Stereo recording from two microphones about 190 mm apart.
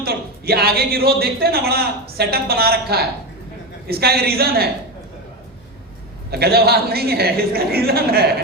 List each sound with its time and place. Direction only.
0.0 s speech: 55° right (ahead or behind)
6.3 s speech: 55° right (ahead or behind)